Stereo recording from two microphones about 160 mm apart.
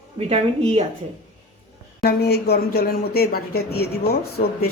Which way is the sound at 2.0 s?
85° left.